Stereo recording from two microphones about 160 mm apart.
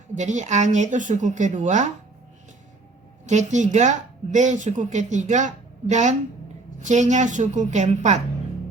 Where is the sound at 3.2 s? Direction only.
50° right (ahead or behind).